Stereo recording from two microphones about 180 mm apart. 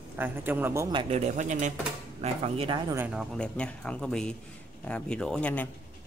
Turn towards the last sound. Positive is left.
turn(degrees=10)  # may be behind; listen again after turning